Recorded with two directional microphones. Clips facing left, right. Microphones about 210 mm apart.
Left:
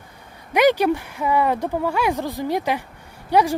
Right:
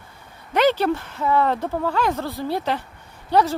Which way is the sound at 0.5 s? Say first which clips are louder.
Left 2 dB; 15° left (ahead or behind).